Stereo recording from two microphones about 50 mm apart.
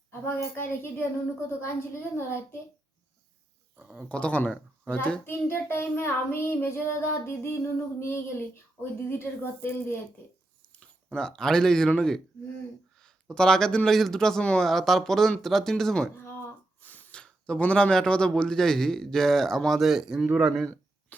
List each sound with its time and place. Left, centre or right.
0.3 s speech: left
2.1 s child singing: left
3.9 s speech: centre
5.2 s child singing: left
7.3 s speech: left
9.6 s child singing: left
10.6 s a sound: left
11.2 s speech: centre
13.0 s speech: centre
16.8 s a sound: left
17.1 s a sound: centre
17.9 s speech: centre
20.4 s speech: centre
21.1 s a sound: left